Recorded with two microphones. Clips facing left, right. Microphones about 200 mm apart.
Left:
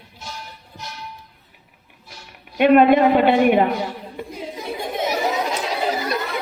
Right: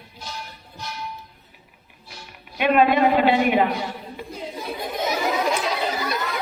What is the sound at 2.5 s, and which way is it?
A woman's voice, 55° left (ahead or behind).